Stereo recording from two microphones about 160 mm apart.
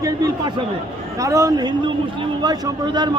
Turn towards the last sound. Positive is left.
turn(degrees=-25)  # may be behind; listen again after turning